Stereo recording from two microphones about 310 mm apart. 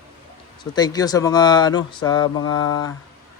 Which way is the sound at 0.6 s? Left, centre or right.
Centre.